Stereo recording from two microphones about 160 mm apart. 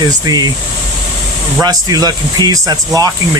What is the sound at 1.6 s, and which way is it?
Speech, 25° right (ahead or behind).